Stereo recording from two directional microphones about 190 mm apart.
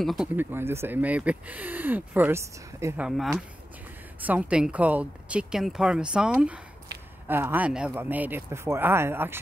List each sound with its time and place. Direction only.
0.0 s speech: centre (ahead or behind)
3.1 s speech: centre (ahead or behind)
6.9 s a sound: 55° right (ahead or behind)
7.2 s speech: 10° right (ahead or behind)